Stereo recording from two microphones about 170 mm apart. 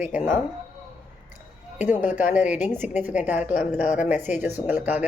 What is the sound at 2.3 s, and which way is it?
Speech, 10° right (ahead or behind).